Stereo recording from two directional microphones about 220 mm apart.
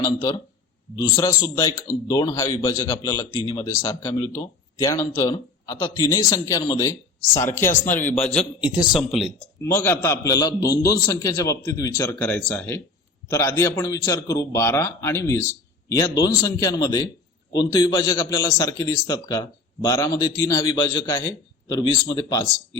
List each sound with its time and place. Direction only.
0.0 s a man's voice: 15° left (ahead or behind)
8.6 s speech: 5° right (ahead or behind)
9.6 s a man's voice: 10° left (ahead or behind)